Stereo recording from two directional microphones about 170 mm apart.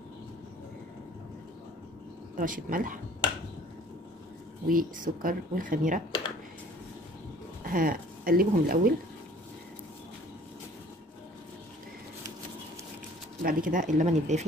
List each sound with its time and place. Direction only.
2.3 s speech: 50° right (ahead or behind)
4.6 s speech: 55° right (ahead or behind)
7.6 s speech: 55° right (ahead or behind)
13.4 s speech: 55° right (ahead or behind)